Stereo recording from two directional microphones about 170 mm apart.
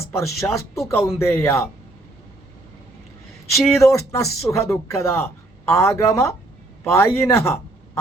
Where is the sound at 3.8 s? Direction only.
20° left (ahead or behind).